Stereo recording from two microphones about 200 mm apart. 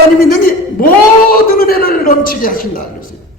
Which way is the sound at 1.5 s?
50° left (ahead or behind).